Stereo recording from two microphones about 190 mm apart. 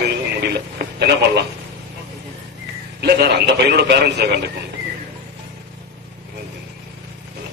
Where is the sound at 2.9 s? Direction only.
60° right (ahead or behind).